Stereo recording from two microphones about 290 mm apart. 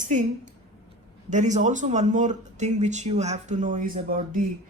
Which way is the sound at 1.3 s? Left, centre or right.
Right.